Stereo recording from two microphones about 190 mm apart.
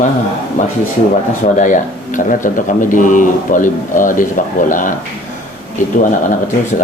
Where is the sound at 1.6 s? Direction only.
45° left (ahead or behind).